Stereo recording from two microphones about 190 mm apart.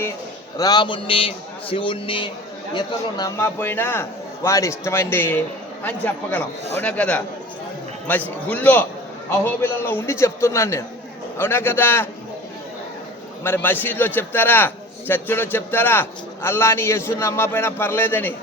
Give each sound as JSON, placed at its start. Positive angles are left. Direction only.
{"t": 0.5, "sound": "a man's voice", "side_deg": 20}
{"t": 13.4, "sound": "a man's voice", "side_deg": 10}